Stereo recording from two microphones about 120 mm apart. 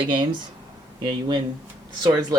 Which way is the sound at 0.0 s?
40° right (ahead or behind).